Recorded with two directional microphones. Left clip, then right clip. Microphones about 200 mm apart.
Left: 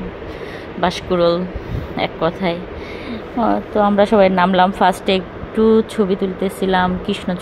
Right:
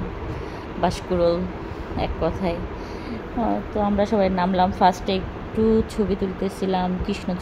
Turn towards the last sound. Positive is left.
turn(degrees=10)  # may be behind; listen again after turning